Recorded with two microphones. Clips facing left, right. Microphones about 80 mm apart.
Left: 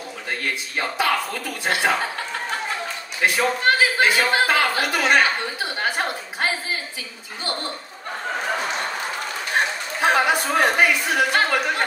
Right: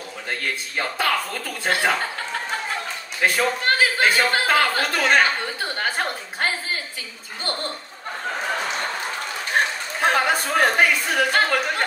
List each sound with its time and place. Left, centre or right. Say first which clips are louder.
0.7 s speech: left 1 dB; centre
3.3 s a woman's voice: left 2 dB; centre
10.0 s speech: left 1 dB; centre